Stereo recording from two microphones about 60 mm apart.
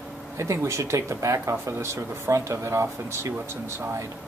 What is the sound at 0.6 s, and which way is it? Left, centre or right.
Speech, right.